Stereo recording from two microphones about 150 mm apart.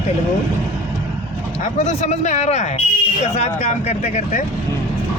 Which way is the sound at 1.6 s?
50° left (ahead or behind).